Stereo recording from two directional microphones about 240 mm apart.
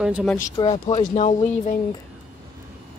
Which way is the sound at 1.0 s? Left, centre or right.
Left.